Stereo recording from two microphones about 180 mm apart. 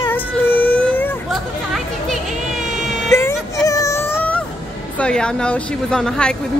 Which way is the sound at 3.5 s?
20° left (ahead or behind).